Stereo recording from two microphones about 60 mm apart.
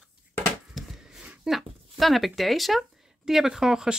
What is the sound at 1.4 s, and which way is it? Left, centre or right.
Speech, centre.